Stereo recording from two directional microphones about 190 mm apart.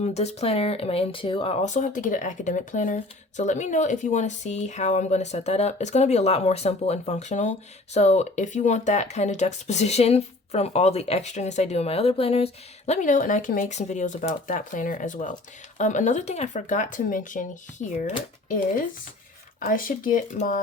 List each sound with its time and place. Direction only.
0.0 s speech: 35° left (ahead or behind)
19.5 s speech: 45° left (ahead or behind)